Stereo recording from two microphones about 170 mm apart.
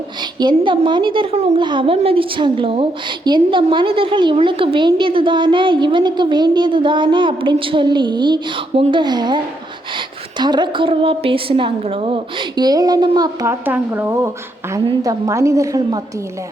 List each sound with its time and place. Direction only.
0.2 s a woman's voice: 25° right (ahead or behind)